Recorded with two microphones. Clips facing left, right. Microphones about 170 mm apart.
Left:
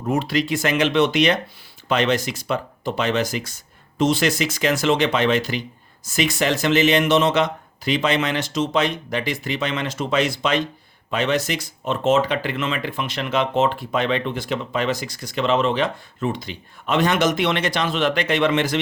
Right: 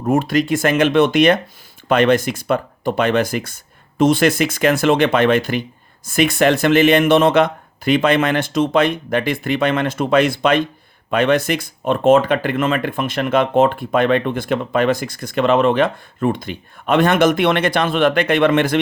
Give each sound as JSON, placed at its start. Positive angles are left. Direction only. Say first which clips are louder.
{"t": 0.0, "sound": "speech", "louder": "right 5 dB", "side_deg": -50}